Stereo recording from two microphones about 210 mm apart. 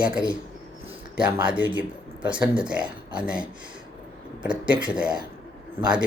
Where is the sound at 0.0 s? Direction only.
5° right (ahead or behind).